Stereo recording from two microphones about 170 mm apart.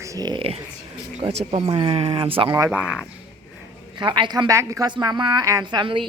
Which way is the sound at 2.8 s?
5° right (ahead or behind).